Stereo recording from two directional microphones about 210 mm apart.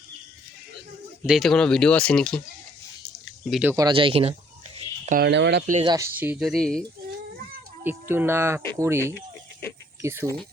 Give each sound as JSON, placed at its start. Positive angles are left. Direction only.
{"t": 1.3, "sound": "speech", "side_deg": 0}
{"t": 3.4, "sound": "speech", "side_deg": 0}
{"t": 3.7, "sound": "speech", "side_deg": -20}
{"t": 5.0, "sound": "speech", "side_deg": -45}
{"t": 5.8, "sound": "speech", "side_deg": -15}
{"t": 7.9, "sound": "speech", "side_deg": -10}